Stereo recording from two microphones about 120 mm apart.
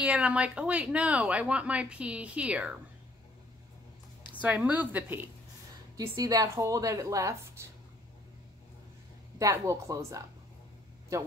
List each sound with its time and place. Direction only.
0.0 s speech: 10° right (ahead or behind)
4.4 s speech: 10° right (ahead or behind)
5.9 s a woman's voice: 30° right (ahead or behind)
9.4 s a woman's voice: 30° right (ahead or behind)